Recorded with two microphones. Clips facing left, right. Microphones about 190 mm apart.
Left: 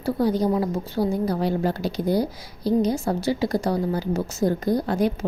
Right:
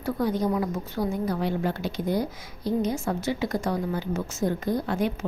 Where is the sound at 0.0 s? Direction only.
35° left (ahead or behind).